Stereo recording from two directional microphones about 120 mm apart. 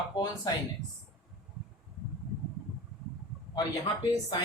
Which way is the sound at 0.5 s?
35° left (ahead or behind).